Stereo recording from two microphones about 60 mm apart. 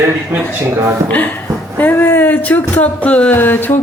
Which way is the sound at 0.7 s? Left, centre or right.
Right.